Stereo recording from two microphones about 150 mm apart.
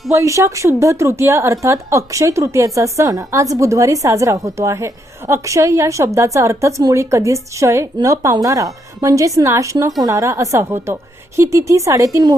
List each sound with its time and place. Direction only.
0.1 s a woman's voice: 20° right (ahead or behind)